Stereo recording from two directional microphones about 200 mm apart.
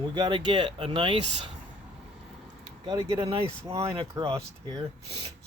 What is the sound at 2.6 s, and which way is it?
Speech, 25° right (ahead or behind).